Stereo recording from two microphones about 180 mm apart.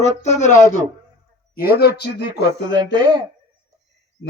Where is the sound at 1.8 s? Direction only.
65° left (ahead or behind).